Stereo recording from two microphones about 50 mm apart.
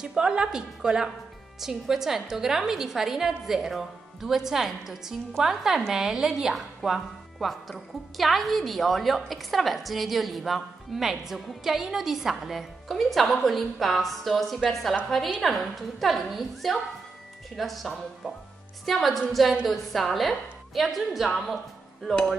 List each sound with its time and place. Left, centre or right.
0.0 s a woman's voice: centre